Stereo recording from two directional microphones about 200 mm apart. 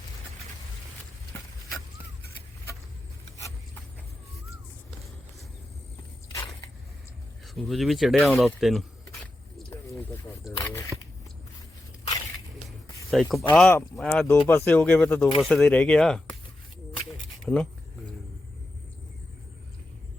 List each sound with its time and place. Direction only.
7.4 s speech: centre (ahead or behind)
9.2 s a sound: 15° left (ahead or behind)
10.6 s shuffling cards: 15° left (ahead or behind)
13.2 s speech: centre (ahead or behind)
17.4 s speech: centre (ahead or behind)